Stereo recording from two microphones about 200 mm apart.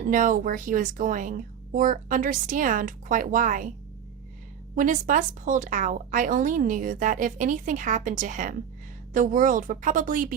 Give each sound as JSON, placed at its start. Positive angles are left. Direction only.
{"t": 0.0, "sound": "a woman's voice", "side_deg": -40}
{"t": 4.7, "sound": "a woman's voice", "side_deg": -40}